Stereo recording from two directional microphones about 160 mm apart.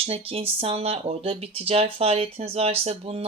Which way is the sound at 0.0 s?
35° right (ahead or behind).